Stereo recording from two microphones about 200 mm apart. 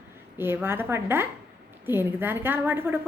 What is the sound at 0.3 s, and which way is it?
A woman's voice, 10° right (ahead or behind).